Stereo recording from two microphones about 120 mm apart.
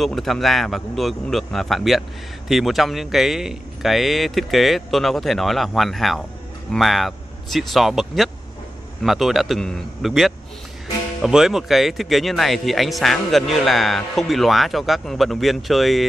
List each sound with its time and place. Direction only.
0.0 s speech: centre (ahead or behind)